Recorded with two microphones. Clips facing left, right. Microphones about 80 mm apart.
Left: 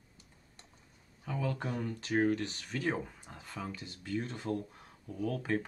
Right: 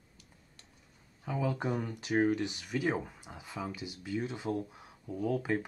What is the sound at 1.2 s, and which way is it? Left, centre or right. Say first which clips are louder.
Speech: right 3 dB; centre.